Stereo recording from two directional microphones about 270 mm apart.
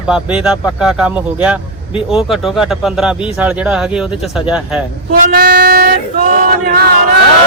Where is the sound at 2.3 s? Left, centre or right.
Centre.